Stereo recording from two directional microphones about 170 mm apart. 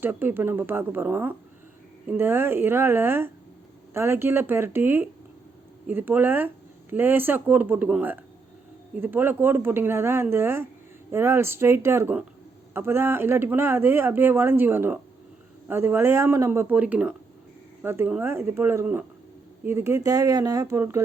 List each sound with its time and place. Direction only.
0.0 s speech: 10° right (ahead or behind)